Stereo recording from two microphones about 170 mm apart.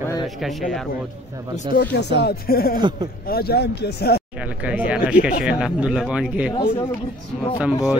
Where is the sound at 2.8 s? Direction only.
25° right (ahead or behind).